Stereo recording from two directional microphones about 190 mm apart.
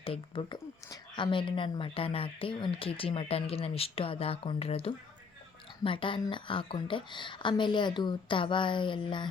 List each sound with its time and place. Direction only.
0.0 s speech: 30° left (ahead or behind)